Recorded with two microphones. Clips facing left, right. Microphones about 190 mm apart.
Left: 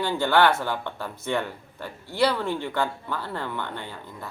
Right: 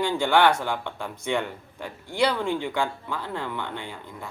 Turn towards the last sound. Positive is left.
turn(degrees=-10)  # may be behind; listen again after turning